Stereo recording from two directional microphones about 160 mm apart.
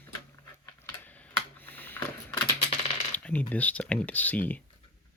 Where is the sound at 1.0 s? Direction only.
10° left (ahead or behind).